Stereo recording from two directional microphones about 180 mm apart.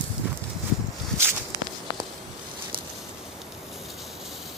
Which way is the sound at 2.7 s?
55° right (ahead or behind).